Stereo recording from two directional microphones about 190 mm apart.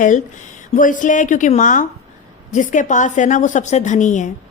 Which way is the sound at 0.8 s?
45° left (ahead or behind).